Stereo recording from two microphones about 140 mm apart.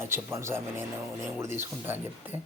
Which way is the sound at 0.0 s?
15° right (ahead or behind).